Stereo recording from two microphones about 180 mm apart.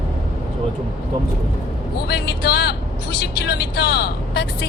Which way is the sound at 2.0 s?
65° left (ahead or behind).